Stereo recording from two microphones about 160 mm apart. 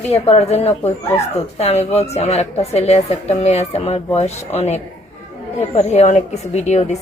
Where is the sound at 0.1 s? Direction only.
40° left (ahead or behind).